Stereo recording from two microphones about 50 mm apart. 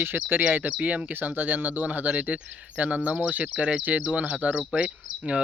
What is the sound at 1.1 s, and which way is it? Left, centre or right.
Speech, right.